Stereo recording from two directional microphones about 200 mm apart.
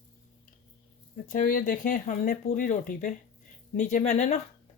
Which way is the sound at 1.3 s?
40° left (ahead or behind).